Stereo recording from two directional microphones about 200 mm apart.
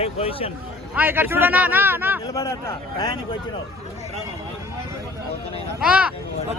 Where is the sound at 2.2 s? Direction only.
15° left (ahead or behind).